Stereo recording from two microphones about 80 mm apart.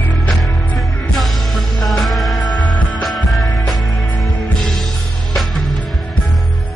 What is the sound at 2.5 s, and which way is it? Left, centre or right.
Music, left.